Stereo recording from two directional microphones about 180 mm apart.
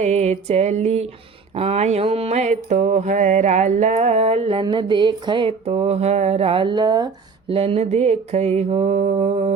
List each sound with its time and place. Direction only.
0.0 s mantra: 35° right (ahead or behind)